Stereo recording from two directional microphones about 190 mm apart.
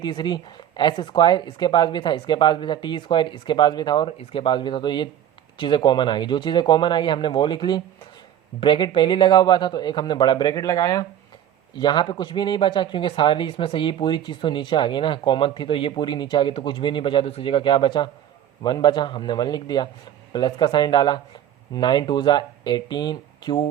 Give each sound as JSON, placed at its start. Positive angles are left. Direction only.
{"t": 0.0, "sound": "speech", "side_deg": 25}